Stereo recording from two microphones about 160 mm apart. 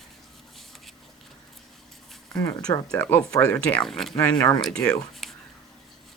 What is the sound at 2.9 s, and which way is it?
Speech, 10° left (ahead or behind).